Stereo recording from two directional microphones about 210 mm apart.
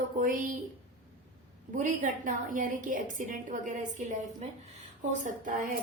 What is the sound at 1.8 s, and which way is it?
A woman's voice, 40° right (ahead or behind).